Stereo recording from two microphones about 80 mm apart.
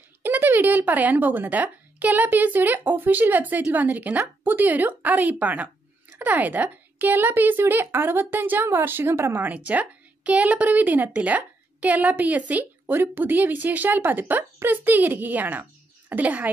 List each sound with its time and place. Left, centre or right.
0.2 s a woman's voice: right